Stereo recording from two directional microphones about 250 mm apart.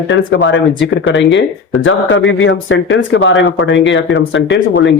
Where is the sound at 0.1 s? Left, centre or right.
Left.